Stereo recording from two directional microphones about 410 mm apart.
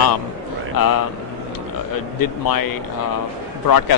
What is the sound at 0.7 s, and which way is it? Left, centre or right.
Speech, left.